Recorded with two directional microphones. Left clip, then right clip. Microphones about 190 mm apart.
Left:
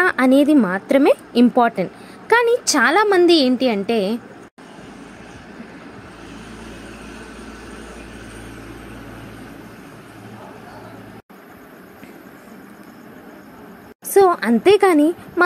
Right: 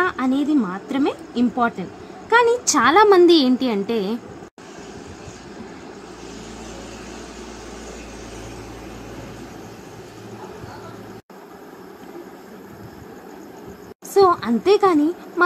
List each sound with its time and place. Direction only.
0.0 s a woman's voice: 25° left (ahead or behind)
14.1 s a woman's voice: 20° left (ahead or behind)